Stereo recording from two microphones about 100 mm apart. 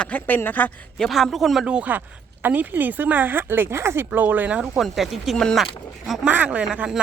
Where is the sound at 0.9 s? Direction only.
Centre (ahead or behind); by 4.8 s 15° right (ahead or behind).